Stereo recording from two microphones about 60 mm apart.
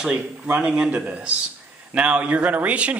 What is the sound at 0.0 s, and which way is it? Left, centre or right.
A man's voice, centre.